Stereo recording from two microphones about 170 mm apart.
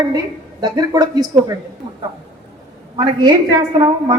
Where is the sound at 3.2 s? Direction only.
25° right (ahead or behind).